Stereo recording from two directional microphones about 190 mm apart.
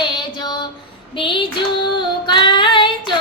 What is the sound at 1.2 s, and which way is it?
Female singing, 25° left (ahead or behind).